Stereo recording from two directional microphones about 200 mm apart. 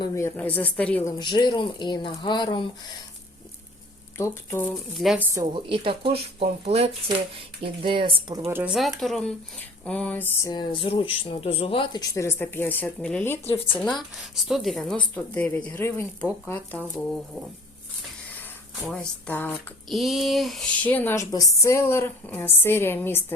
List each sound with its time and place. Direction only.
0.0 s speech: 15° left (ahead or behind)
1.2 s speech: 20° left (ahead or behind)
4.2 s speech: 10° left (ahead or behind)
4.7 s a woman's voice: centre (ahead or behind); by 8.4 s 25° right (ahead or behind)
8.4 s a woman's voice: 10° right (ahead or behind); by 10.5 s 10° left (ahead or behind)
10.5 s a woman's voice: 20° left (ahead or behind)
18.9 s speech: 5° left (ahead or behind)